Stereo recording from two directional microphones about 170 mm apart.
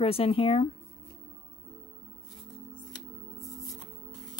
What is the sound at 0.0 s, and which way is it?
Speech, 35° left (ahead or behind).